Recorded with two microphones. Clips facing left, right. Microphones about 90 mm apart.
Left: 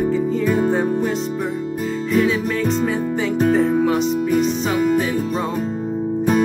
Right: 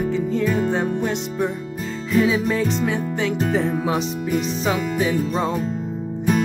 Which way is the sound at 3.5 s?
10° right (ahead or behind).